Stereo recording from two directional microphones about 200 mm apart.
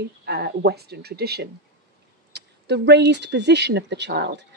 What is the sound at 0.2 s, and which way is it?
Speech, 55° right (ahead or behind).